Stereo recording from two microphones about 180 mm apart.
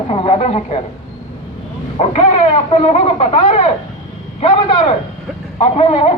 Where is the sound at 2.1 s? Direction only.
35° left (ahead or behind).